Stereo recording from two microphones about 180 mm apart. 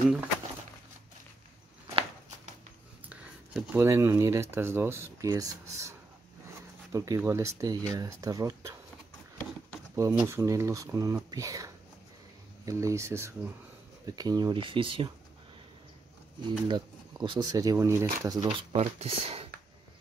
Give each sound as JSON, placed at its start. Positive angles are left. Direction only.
{"t": 3.1, "sound": "speech", "side_deg": -10}
{"t": 10.1, "sound": "speech", "side_deg": -15}
{"t": 16.4, "sound": "speech", "side_deg": -25}